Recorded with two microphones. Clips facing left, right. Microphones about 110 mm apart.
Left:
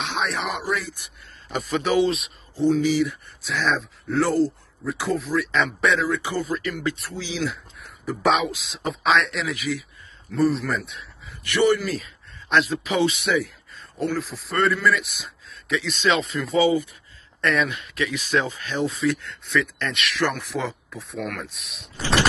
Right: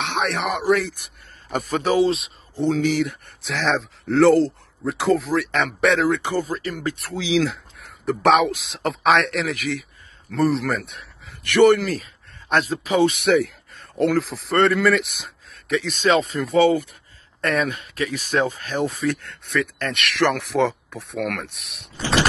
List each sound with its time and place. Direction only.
0.0 s a man's voice: 65° right (ahead or behind); by 2.3 s 30° right (ahead or behind)
2.6 s speech: 65° right (ahead or behind)
6.3 s speech: 40° right (ahead or behind)
7.0 s speech: 85° right
8.0 s speech: 65° right (ahead or behind)
10.3 s speech: 80° right
10.9 s speech: 60° right (ahead or behind)
12.4 s speech: 45° right (ahead or behind); by 14.4 s 90° right
14.5 s speech: 70° right (ahead or behind)
15.7 s speech: 50° right (ahead or behind)
17.4 s speech: 45° right (ahead or behind); by 21.6 s 70° right (ahead or behind)